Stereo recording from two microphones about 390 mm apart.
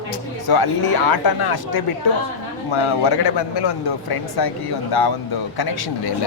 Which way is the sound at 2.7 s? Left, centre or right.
Left.